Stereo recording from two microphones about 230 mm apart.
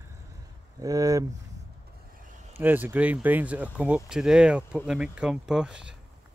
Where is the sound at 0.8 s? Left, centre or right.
Centre.